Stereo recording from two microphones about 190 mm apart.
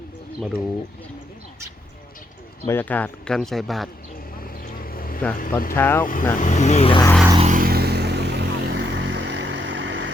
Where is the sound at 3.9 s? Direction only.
50° left (ahead or behind).